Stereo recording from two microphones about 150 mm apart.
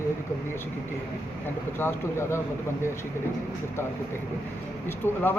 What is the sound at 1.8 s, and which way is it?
Speech, 15° left (ahead or behind).